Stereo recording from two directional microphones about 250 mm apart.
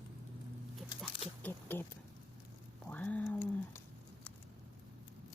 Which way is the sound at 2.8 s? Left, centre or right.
Centre.